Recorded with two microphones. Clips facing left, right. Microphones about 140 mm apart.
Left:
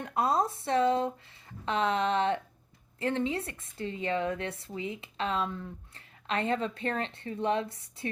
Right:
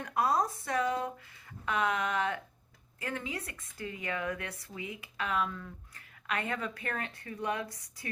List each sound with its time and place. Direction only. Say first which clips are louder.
0.0 s speech: left 2 dB; 25° left (ahead or behind)